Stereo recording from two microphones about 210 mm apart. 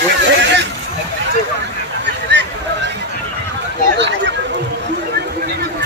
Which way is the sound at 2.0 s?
55° right (ahead or behind).